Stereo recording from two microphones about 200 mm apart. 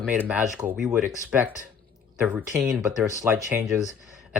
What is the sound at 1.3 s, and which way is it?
Speech, 5° right (ahead or behind).